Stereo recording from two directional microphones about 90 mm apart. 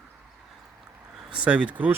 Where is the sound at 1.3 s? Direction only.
15° right (ahead or behind).